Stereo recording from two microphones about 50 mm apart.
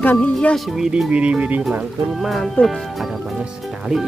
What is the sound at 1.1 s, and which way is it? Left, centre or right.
Speech, right.